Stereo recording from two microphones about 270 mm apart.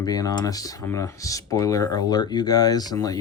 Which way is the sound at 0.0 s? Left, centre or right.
Centre.